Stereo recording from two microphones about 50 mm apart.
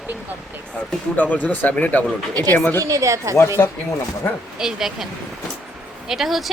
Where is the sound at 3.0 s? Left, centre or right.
Right.